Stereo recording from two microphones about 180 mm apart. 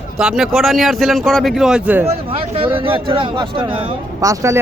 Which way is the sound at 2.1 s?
30° right (ahead or behind).